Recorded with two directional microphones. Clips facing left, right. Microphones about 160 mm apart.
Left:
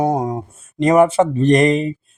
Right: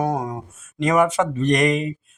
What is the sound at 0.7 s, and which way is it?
Mantra, 35° left (ahead or behind).